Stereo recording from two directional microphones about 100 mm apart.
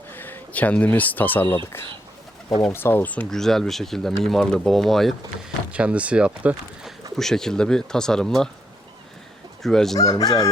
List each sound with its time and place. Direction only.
0.1 s speech: 20° left (ahead or behind)
2.7 s speech: 20° left (ahead or behind)
3.2 s speech: 5° left (ahead or behind)
5.7 s speech: 15° right (ahead or behind)
7.2 s speech: 5° left (ahead or behind)
9.6 s speech: 5° left (ahead or behind)
10.0 s speech: 40° left (ahead or behind)